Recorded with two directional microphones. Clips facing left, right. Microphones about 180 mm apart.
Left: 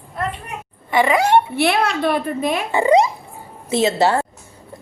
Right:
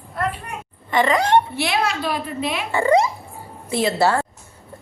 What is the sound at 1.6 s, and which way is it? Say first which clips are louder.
A woman's voice: left 4 dB; 55° left (ahead or behind).